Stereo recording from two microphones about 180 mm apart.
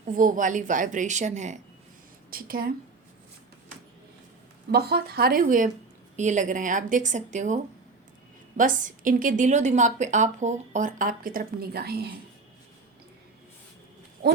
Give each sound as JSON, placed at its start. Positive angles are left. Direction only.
{"t": 0.0, "sound": "a woman's voice", "side_deg": -45}
{"t": 2.3, "sound": "a woman's voice", "side_deg": -55}
{"t": 4.7, "sound": "a woman's voice", "side_deg": -60}